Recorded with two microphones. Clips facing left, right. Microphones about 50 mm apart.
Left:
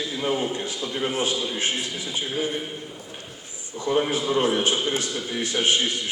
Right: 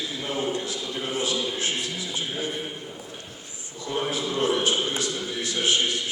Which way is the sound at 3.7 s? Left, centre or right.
Left.